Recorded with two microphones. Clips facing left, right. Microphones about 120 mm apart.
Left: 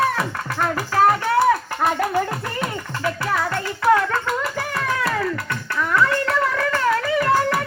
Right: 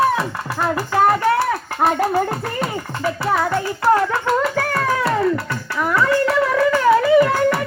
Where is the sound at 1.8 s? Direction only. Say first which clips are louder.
Right 5 dB; 45° right (ahead or behind).